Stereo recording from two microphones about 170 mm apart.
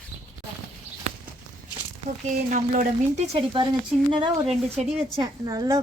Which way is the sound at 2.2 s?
45° right (ahead or behind).